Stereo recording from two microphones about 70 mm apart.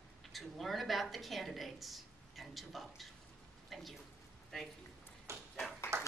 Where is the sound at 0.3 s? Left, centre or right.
Centre.